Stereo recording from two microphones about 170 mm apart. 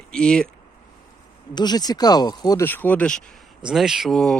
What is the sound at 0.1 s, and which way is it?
Speech, 5° left (ahead or behind).